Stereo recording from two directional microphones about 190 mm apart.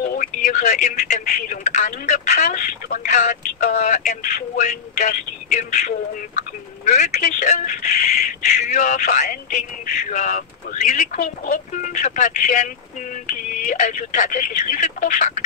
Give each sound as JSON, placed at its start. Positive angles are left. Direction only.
{"t": 0.1, "sound": "speech", "side_deg": 45}